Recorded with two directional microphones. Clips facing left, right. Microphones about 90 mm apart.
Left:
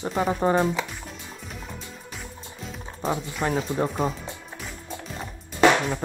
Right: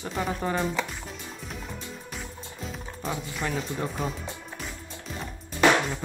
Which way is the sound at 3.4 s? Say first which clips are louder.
Left 5 dB; 20° left (ahead or behind).